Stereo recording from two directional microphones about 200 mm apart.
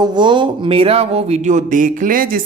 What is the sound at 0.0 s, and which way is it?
Speech, 20° right (ahead or behind).